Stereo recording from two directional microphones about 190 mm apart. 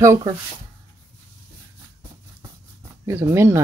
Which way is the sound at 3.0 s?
15° right (ahead or behind).